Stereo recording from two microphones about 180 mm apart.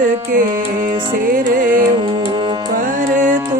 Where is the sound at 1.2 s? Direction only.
50° right (ahead or behind).